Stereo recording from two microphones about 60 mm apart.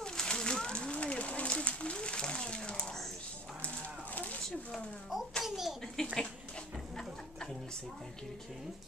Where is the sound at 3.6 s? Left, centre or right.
Left.